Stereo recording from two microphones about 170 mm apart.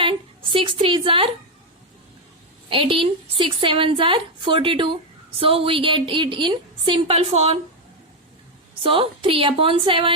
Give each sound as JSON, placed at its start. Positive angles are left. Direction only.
{"t": 0.0, "sound": "a woman's voice", "side_deg": -30}
{"t": 2.6, "sound": "a woman's voice", "side_deg": -30}
{"t": 8.8, "sound": "a woman's voice", "side_deg": -30}